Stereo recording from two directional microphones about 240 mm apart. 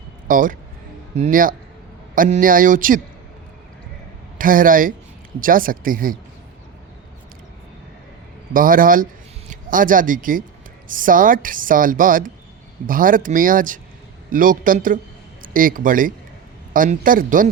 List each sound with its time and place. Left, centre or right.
0.3 s speech: right
4.4 s speech: right
8.5 s speech: right